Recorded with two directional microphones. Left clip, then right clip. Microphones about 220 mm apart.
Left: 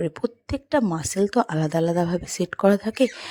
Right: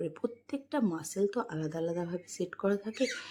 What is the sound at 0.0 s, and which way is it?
Speech, 35° left (ahead or behind).